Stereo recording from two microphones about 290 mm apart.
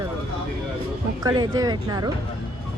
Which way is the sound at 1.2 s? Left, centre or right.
Centre.